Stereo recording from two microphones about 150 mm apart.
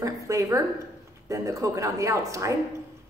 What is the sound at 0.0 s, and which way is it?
A woman's voice, 20° right (ahead or behind).